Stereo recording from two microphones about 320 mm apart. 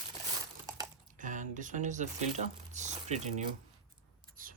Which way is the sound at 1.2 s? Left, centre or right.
Right.